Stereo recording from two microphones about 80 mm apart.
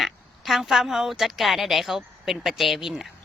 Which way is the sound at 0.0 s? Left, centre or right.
Centre.